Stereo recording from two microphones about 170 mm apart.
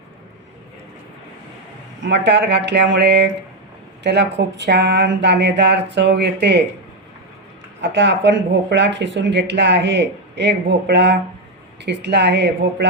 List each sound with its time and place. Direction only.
2.0 s speech: 90° right
7.8 s speech: 90° right